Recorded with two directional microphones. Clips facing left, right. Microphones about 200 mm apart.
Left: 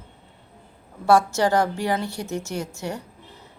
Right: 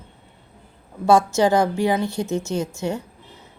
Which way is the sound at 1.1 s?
15° right (ahead or behind).